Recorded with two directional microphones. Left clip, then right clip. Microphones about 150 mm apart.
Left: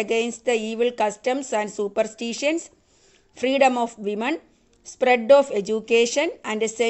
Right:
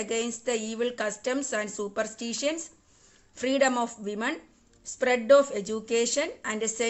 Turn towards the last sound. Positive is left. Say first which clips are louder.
# left 6 dB
turn(degrees=35)  # may be behind; listen again after turning